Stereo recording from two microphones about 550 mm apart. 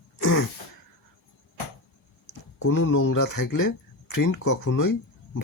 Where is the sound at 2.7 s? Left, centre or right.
Left.